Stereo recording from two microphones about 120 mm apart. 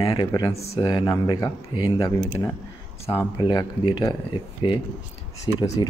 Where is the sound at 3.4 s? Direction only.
40° left (ahead or behind).